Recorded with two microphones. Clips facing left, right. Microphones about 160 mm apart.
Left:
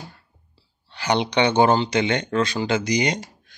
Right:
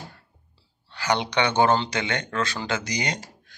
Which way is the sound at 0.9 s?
20° left (ahead or behind).